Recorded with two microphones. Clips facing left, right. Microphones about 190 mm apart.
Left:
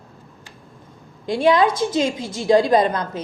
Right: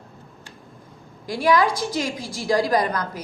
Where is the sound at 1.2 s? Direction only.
25° left (ahead or behind).